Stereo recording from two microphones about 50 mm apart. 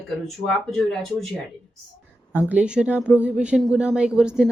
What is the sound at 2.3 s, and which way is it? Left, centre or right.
Speech, right.